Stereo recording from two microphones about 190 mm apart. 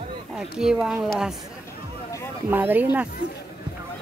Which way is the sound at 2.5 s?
10° right (ahead or behind).